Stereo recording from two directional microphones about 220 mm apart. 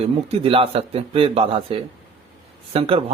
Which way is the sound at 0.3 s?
25° right (ahead or behind).